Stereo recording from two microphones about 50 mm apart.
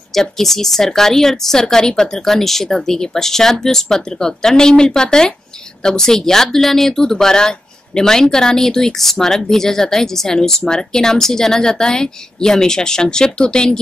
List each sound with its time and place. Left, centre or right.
0.1 s speech: centre